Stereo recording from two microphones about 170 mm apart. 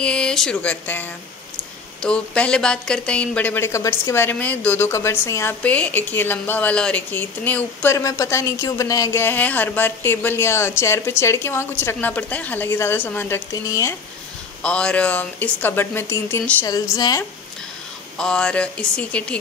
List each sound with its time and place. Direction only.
0.0 s a woman's voice: 5° left (ahead or behind)
14.6 s a woman's voice: 5° left (ahead or behind)
18.1 s speech: 5° left (ahead or behind)